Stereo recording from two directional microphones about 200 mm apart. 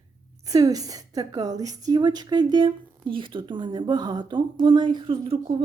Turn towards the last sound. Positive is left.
turn(degrees=-30)  # may be behind; listen again after turning